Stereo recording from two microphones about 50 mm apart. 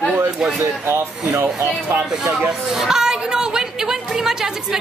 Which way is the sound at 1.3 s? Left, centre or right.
Right.